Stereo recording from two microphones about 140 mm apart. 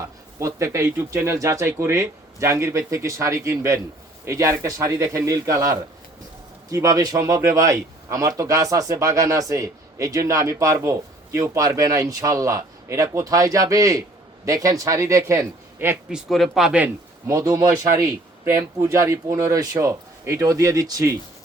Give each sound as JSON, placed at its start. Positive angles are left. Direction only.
{"t": 0.3, "sound": "speech", "side_deg": -20}
{"t": 16.0, "sound": "speech", "side_deg": 0}
{"t": 17.2, "sound": "speech", "side_deg": -20}